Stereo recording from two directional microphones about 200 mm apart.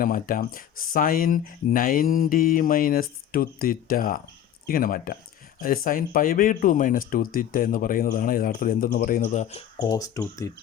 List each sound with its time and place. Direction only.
0.0 s speech: 45° left (ahead or behind)
9.7 s speech: 20° left (ahead or behind)